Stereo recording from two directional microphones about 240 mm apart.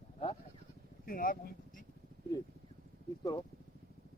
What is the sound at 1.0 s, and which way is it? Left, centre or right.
Speech, left.